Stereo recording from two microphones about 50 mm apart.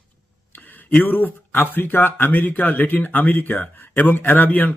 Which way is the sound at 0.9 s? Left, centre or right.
Left.